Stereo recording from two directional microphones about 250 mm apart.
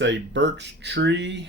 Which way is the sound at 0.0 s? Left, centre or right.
Right.